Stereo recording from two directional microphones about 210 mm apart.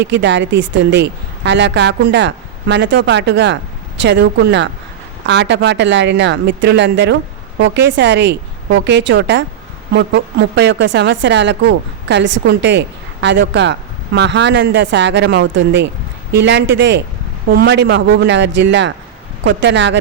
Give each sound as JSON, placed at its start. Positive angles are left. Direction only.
{"t": 0.2, "sound": "speech", "side_deg": -60}